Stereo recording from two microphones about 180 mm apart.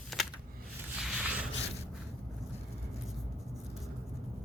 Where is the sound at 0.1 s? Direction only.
Centre (ahead or behind).